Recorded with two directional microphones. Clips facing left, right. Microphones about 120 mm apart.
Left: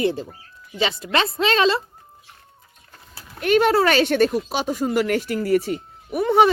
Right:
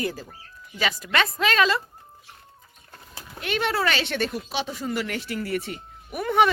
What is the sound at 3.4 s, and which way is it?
Speech, 45° left (ahead or behind).